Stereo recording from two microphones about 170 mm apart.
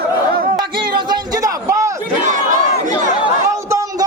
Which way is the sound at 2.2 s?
50° right (ahead or behind).